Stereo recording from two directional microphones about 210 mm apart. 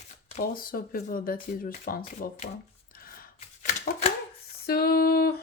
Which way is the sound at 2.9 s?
45° left (ahead or behind).